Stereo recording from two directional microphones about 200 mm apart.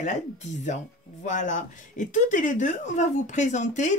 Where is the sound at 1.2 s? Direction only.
40° left (ahead or behind).